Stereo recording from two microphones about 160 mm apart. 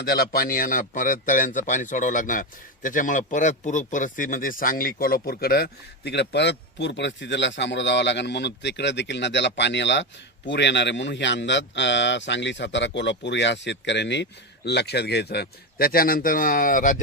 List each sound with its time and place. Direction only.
0.0 s a man's voice: 75° left (ahead or behind); by 17.0 s 55° left (ahead or behind)